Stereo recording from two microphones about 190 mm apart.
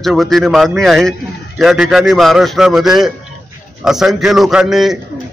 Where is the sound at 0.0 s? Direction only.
Centre (ahead or behind).